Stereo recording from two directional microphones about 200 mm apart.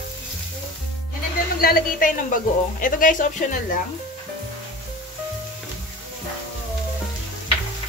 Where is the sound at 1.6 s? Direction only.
45° left (ahead or behind).